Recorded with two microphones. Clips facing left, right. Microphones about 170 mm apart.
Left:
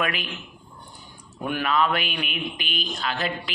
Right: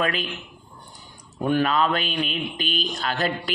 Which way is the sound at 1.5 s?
35° right (ahead or behind).